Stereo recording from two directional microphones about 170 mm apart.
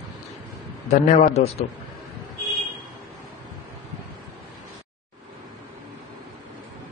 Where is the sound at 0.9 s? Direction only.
40° left (ahead or behind).